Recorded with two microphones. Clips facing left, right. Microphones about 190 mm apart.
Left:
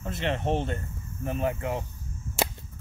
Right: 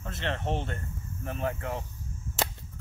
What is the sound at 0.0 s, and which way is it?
A man's voice, 15° left (ahead or behind).